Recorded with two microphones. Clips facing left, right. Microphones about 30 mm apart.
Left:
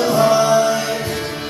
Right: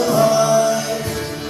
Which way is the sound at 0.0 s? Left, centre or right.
Left.